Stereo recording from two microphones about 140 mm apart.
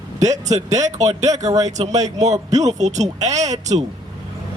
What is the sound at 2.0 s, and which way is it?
Speech, 55° right (ahead or behind).